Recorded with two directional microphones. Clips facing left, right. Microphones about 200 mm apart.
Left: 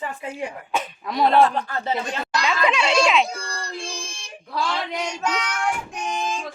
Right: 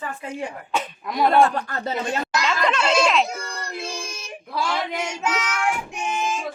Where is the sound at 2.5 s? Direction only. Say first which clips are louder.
Left 1 dB; 5° left (ahead or behind).